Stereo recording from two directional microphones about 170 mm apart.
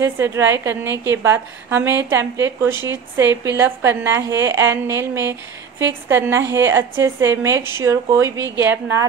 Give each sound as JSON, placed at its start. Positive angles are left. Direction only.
{"t": 0.0, "sound": "a woman's voice", "side_deg": -15}